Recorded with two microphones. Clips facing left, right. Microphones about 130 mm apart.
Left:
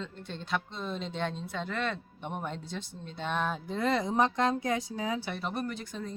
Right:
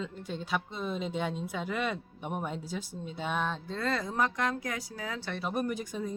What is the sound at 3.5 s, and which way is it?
Speech, 15° left (ahead or behind).